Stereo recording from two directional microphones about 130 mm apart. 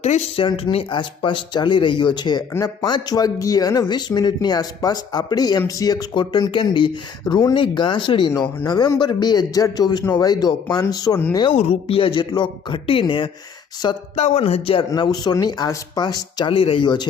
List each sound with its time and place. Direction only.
0.3 s speech: 40° left (ahead or behind)
11.3 s speech: 40° left (ahead or behind)
14.2 s speech: 55° left (ahead or behind)
14.8 s speech: 30° left (ahead or behind)
16.5 s speech: 45° left (ahead or behind)